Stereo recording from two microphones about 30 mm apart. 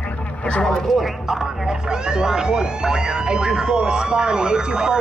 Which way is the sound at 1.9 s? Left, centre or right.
Right.